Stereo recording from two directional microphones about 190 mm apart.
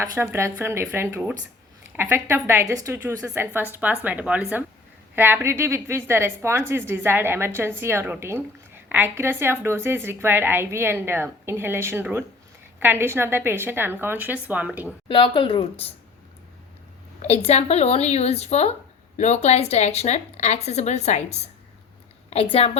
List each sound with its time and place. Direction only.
0.0 s a woman's voice: 10° right (ahead or behind)
15.0 s a woman's voice: 25° left (ahead or behind)
17.2 s a woman's voice: 35° left (ahead or behind)
22.5 s a woman's voice: 30° left (ahead or behind)